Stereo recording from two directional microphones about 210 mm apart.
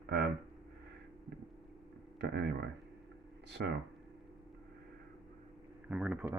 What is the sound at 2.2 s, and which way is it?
Speech, 50° right (ahead or behind).